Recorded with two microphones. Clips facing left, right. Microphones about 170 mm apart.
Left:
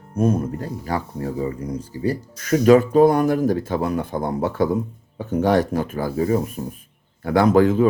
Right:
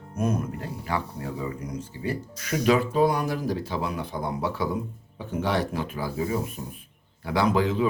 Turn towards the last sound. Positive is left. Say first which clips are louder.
# left 8 dB
turn(degrees=45)  # may be behind; listen again after turning